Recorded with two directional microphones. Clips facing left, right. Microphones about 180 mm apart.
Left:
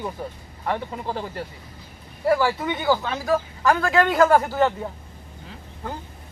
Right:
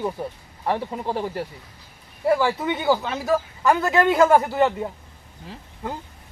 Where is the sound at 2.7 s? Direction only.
10° right (ahead or behind).